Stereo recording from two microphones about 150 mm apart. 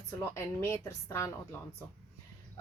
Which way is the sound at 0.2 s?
15° left (ahead or behind).